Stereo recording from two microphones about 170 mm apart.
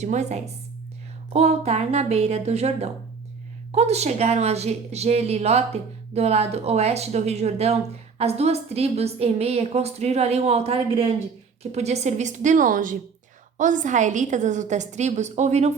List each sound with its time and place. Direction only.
0.0 s a woman's voice: 45° right (ahead or behind)